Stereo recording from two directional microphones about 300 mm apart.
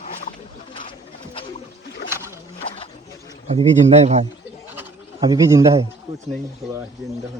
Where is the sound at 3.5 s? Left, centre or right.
Right.